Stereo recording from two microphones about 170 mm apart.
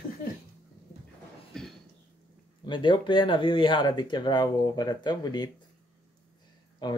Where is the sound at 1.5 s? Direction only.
Centre (ahead or behind).